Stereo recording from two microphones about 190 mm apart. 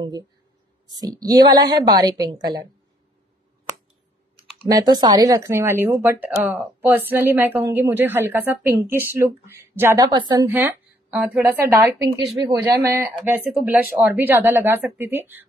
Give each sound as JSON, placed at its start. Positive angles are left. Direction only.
{"t": 1.0, "sound": "a woman's voice", "side_deg": -20}
{"t": 4.6, "sound": "speech", "side_deg": -20}
{"t": 10.5, "sound": "speech", "side_deg": -10}